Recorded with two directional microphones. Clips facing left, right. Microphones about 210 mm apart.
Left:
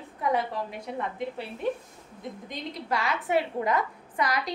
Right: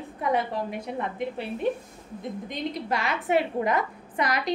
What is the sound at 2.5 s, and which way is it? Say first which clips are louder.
A woman's voice: right 2 dB; 20° right (ahead or behind).